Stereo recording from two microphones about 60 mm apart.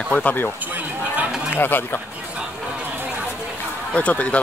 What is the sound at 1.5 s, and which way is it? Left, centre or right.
Speech, left.